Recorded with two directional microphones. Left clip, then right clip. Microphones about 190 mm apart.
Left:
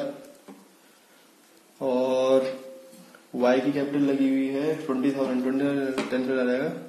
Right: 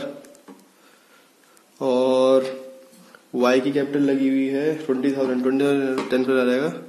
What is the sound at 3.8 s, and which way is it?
A man's voice, 60° right (ahead or behind).